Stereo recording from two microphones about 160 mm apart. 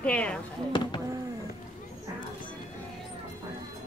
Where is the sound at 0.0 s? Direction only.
5° left (ahead or behind).